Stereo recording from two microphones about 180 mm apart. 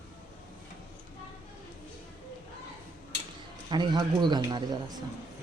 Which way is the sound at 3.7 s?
25° right (ahead or behind).